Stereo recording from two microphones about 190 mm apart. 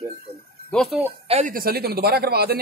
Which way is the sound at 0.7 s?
5° left (ahead or behind).